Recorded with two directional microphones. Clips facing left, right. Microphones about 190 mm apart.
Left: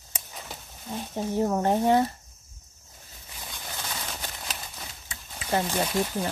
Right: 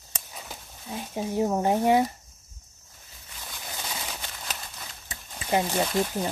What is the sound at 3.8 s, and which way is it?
Bird, 10° right (ahead or behind).